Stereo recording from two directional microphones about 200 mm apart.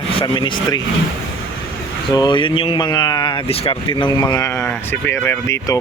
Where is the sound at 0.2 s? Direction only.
25° left (ahead or behind).